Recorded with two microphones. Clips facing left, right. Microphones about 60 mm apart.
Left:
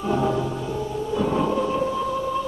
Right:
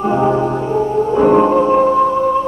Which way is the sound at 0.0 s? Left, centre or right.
Right.